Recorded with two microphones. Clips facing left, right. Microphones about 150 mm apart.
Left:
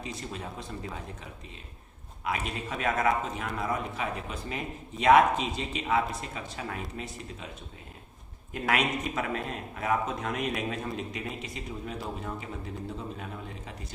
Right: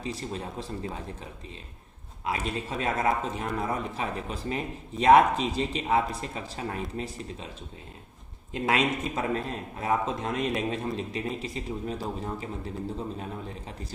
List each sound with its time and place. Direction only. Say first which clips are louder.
0.0 s a man's voice: right 4 dB; 35° right (ahead or behind)
8.5 s speech: right 2 dB; 25° right (ahead or behind)